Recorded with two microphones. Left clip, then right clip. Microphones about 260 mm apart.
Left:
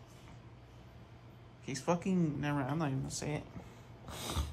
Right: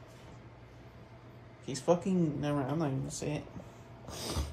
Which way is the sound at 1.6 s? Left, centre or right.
Centre.